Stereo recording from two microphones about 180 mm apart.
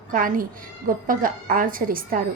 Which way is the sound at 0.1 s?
50° right (ahead or behind).